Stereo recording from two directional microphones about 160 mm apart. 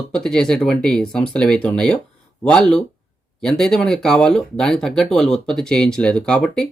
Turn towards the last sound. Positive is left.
turn(degrees=5)  # may be behind; listen again after turning